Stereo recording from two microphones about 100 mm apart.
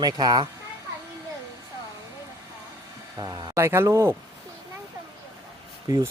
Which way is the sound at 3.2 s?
40° right (ahead or behind).